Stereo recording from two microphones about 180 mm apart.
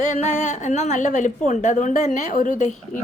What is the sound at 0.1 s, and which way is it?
A woman's voice, 40° left (ahead or behind).